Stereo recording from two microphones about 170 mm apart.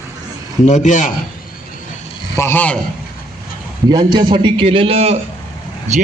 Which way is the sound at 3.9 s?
25° right (ahead or behind).